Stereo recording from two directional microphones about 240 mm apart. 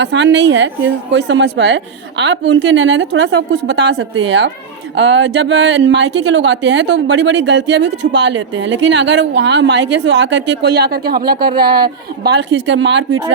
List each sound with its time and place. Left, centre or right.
0.0 s speech: right